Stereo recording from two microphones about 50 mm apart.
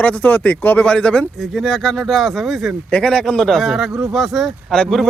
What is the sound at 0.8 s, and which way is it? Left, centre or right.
Speech, left.